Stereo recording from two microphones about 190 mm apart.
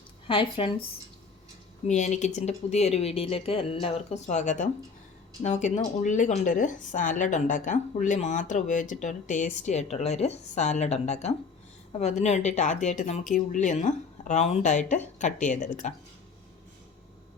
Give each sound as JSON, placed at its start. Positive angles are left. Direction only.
{"t": 0.3, "sound": "speech", "side_deg": 30}
{"t": 1.9, "sound": "speech", "side_deg": 40}